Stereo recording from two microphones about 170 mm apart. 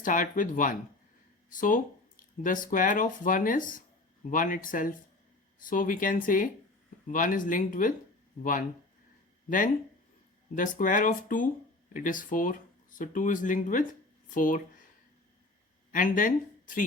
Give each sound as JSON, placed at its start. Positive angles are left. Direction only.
{"t": 0.0, "sound": "speech", "side_deg": 50}
{"t": 10.5, "sound": "speech", "side_deg": 50}
{"t": 15.9, "sound": "speech", "side_deg": 50}